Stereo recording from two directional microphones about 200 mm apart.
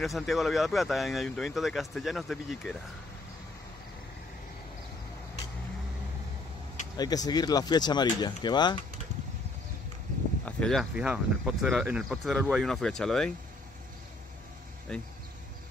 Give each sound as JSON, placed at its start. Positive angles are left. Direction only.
{"t": 0.0, "sound": "speech", "side_deg": 0}
{"t": 7.0, "sound": "speech", "side_deg": 20}
{"t": 10.4, "sound": "speech", "side_deg": 5}
{"t": 14.9, "sound": "speech", "side_deg": 5}